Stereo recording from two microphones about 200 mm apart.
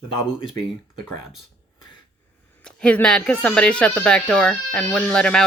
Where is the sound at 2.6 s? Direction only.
5° left (ahead or behind).